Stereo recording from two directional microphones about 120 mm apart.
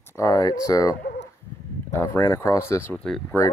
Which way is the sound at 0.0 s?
25° left (ahead or behind).